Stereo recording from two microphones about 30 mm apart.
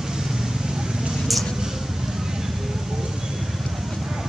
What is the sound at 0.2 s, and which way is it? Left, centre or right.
Vehicle, centre.